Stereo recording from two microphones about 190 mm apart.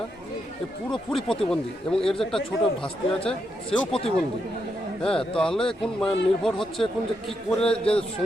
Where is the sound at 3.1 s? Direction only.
30° left (ahead or behind).